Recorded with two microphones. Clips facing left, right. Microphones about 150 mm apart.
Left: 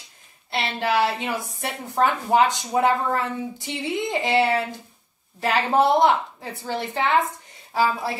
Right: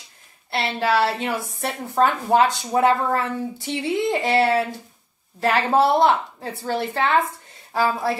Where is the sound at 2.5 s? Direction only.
15° left (ahead or behind).